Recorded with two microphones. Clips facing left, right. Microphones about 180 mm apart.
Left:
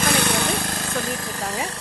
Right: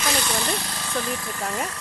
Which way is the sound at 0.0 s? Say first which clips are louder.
Left 4 dB; 60° left (ahead or behind).